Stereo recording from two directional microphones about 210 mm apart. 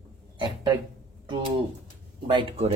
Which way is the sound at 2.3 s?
30° right (ahead or behind).